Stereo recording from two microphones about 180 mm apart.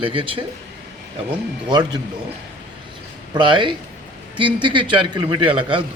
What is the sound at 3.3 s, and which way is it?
A man's voice, 25° right (ahead or behind).